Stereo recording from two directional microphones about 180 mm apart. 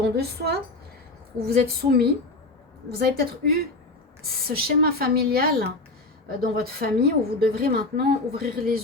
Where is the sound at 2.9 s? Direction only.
60° right (ahead or behind).